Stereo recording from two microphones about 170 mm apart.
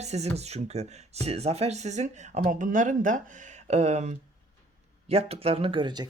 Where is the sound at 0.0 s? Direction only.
40° right (ahead or behind).